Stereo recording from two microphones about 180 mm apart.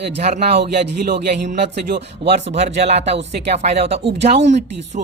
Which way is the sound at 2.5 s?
40° right (ahead or behind).